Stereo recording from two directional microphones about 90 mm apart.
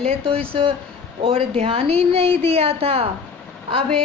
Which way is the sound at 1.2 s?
90° right.